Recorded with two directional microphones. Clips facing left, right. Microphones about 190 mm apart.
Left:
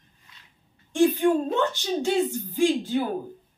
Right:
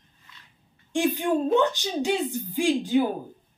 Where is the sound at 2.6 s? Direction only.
15° right (ahead or behind).